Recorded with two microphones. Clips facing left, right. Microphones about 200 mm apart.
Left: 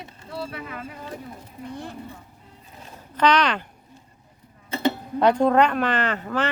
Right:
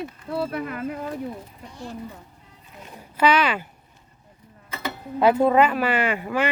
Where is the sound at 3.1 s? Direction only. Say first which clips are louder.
Even; 5° right (ahead or behind).